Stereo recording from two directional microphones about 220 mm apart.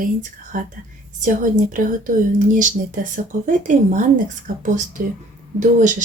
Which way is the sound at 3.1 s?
35° right (ahead or behind).